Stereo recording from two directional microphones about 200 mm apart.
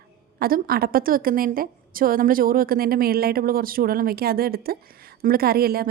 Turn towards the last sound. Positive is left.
turn(degrees=-50)  # may be behind; listen again after turning